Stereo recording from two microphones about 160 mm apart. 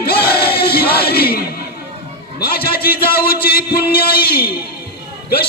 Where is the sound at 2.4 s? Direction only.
70° left (ahead or behind).